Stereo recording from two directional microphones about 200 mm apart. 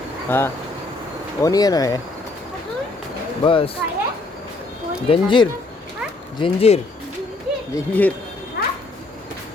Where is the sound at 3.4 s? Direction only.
25° left (ahead or behind).